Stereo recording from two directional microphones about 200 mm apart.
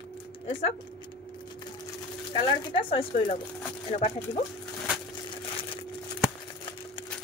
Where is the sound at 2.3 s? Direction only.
25° left (ahead or behind).